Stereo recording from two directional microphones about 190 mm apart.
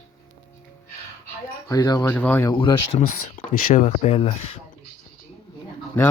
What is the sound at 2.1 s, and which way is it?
Speech, 10° left (ahead or behind).